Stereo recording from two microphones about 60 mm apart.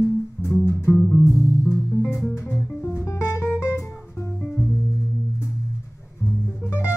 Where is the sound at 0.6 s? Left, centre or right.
Left.